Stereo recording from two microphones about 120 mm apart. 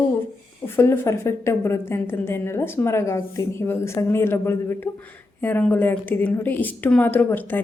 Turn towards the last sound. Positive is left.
turn(degrees=15)  # may be behind; listen again after turning